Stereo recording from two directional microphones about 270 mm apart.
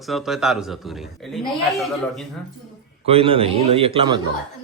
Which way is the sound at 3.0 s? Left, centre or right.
Right.